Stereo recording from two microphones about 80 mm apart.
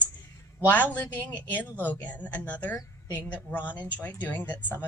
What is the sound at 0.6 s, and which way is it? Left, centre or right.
Female singing, centre.